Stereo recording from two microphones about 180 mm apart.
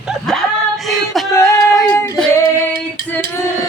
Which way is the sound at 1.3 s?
15° left (ahead or behind).